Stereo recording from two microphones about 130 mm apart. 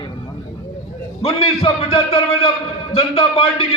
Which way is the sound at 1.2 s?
45° left (ahead or behind).